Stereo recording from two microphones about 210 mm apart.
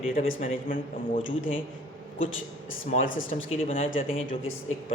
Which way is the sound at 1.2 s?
65° left (ahead or behind).